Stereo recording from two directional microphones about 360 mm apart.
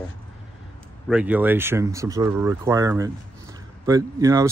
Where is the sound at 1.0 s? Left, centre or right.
Centre.